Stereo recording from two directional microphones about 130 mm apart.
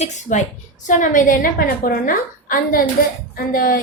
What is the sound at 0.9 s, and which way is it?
A woman's voice, 85° left.